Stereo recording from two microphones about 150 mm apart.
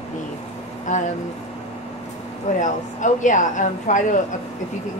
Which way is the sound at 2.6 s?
55° left (ahead or behind).